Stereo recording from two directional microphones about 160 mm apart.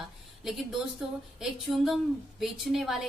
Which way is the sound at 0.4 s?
Centre (ahead or behind).